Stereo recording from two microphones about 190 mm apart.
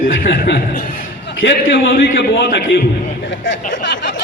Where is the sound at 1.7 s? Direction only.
70° left (ahead or behind).